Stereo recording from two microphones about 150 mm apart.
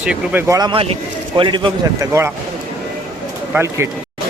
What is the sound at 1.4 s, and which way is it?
Speech, 30° right (ahead or behind).